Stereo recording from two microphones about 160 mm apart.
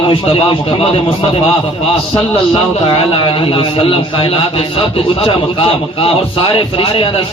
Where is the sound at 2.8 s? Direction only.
35° left (ahead or behind).